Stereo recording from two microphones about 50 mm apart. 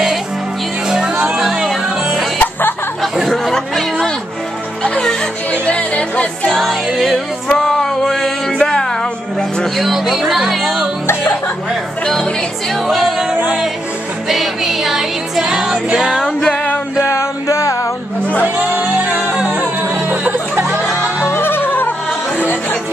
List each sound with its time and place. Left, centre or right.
0.8 s music: centre
2.3 s music: left
3.0 s chatter: centre
3.5 s a sound: centre
5.5 s music: left
6.5 s music: centre
7.4 s music: centre
9.8 s speech: centre
12.9 s music: centre
17.0 s a sound: left
18.4 s music: right
19.8 s music: right
21.3 s music: left